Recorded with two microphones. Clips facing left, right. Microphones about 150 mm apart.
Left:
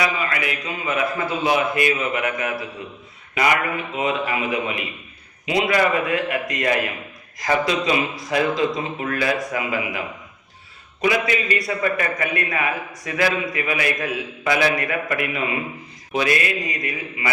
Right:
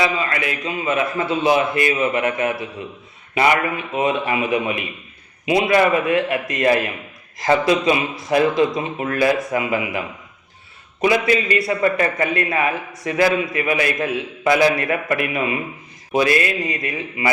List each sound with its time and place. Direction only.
0.0 s a man's voice: 25° right (ahead or behind)
11.0 s a man's voice: 30° right (ahead or behind)